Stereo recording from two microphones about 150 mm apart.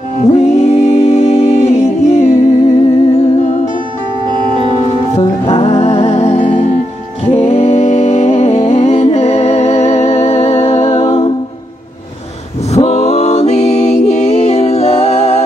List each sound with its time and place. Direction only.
0.2 s music: 45° left (ahead or behind)
4.8 s music: 40° left (ahead or behind)
12.7 s music: 45° left (ahead or behind)